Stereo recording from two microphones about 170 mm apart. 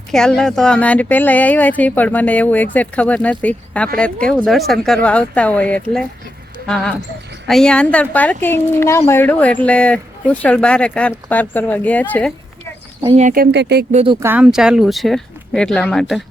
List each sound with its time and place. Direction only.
0.1 s speech: 5° left (ahead or behind)
7.4 s speech: 5° left (ahead or behind)
13.1 s speech: 55° right (ahead or behind); by 13.8 s 80° right
13.9 s speech: 35° right (ahead or behind)
14.2 s speech: 10° right (ahead or behind)